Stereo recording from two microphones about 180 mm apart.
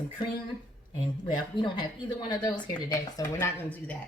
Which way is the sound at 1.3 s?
25° left (ahead or behind).